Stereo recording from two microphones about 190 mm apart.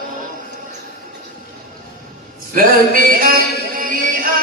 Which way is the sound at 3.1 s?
50° right (ahead or behind).